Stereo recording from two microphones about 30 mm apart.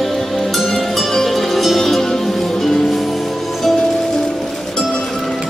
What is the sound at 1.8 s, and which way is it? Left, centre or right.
Music, centre.